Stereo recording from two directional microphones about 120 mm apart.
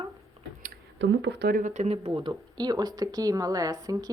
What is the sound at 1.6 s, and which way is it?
Speech, 85° right.